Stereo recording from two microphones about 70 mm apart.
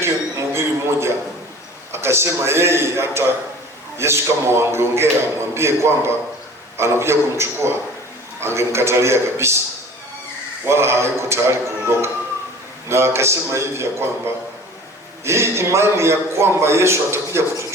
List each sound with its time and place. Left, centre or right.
0.0 s a sound: right
1.9 s a man's voice: right
10.7 s a man's voice: right
15.2 s a man's voice: right